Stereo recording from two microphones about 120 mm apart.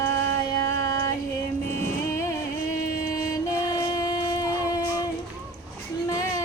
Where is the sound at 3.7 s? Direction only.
30° left (ahead or behind).